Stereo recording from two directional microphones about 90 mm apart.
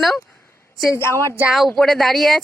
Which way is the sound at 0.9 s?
25° left (ahead or behind).